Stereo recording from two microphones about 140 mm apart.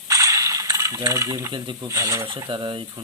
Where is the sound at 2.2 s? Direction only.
35° right (ahead or behind).